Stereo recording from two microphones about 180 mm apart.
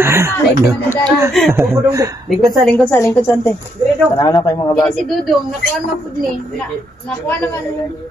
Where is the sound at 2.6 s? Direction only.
Centre (ahead or behind); by 4.7 s 20° left (ahead or behind).